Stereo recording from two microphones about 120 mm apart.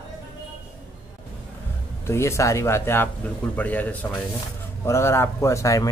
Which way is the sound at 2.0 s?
25° left (ahead or behind).